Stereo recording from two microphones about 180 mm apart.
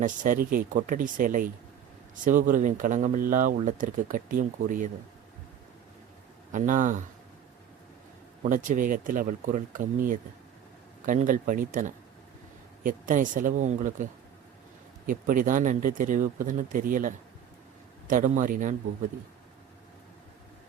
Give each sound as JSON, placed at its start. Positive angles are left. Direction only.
{"t": 0.0, "sound": "speech", "side_deg": -45}
{"t": 6.5, "sound": "speech", "side_deg": -45}
{"t": 8.4, "sound": "speech", "side_deg": -45}